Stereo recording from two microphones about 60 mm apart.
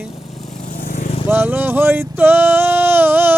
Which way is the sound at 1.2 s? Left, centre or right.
Right.